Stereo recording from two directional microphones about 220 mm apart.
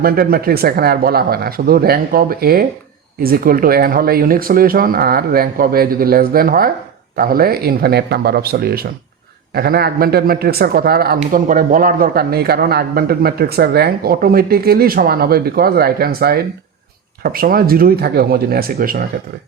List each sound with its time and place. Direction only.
0.0 s a man's voice: 45° right (ahead or behind)